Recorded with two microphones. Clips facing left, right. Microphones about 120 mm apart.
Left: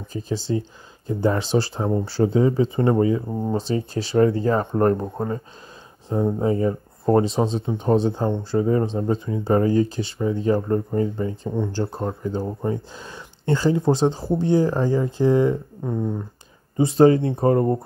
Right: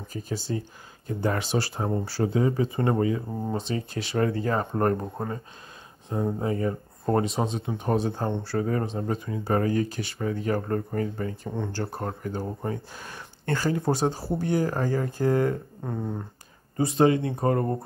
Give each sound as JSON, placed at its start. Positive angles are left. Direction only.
{"t": 0.1, "sound": "speech", "side_deg": 25}
{"t": 11.5, "sound": "speech", "side_deg": 10}
{"t": 11.8, "sound": "speech", "side_deg": 25}
{"t": 16.7, "sound": "speech", "side_deg": 30}